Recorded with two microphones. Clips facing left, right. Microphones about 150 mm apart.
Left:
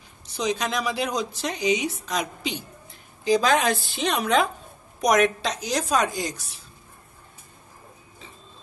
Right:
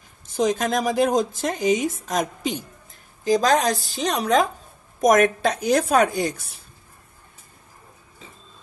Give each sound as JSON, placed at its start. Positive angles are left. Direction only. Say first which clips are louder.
{"t": 0.3, "sound": "speech", "louder": "right 5 dB", "side_deg": -50}